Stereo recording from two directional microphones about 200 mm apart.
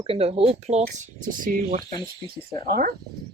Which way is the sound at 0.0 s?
30° right (ahead or behind).